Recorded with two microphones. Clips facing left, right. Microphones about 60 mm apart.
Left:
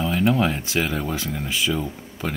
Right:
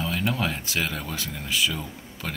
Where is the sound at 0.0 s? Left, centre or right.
Centre.